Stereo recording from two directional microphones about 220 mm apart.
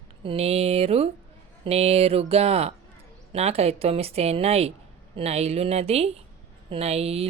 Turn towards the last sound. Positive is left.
turn(degrees=-30)  # may be behind; listen again after turning